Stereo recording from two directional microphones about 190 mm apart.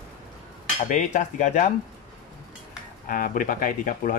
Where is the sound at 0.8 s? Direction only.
40° left (ahead or behind).